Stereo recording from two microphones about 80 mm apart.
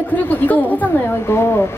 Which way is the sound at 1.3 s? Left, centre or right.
Left.